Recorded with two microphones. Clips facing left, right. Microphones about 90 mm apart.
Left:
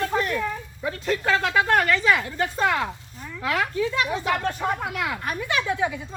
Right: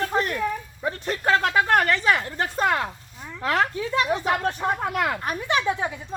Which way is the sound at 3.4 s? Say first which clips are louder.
Right 3 dB; 40° right (ahead or behind).